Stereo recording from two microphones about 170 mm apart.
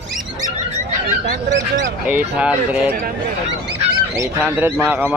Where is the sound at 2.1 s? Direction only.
10° right (ahead or behind).